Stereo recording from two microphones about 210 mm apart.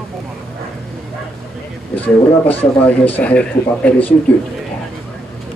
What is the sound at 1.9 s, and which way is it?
Speech, 10° left (ahead or behind).